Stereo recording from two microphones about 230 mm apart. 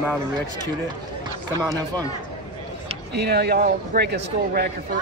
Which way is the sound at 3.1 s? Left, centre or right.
Right.